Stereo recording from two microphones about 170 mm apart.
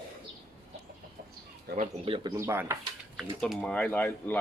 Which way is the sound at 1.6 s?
50° right (ahead or behind).